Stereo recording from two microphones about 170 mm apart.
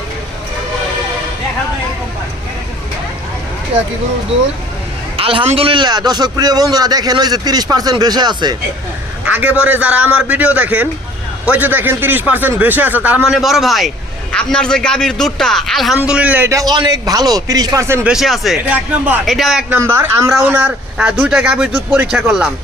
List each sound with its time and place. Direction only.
5.1 s a man's voice: 30° right (ahead or behind)
9.2 s a man's voice: 10° right (ahead or behind)
18.1 s a man's voice: centre (ahead or behind)
19.7 s a man's voice: 10° right (ahead or behind)